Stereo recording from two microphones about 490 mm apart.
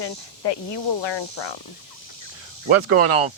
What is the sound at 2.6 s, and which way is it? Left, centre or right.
Speech, right.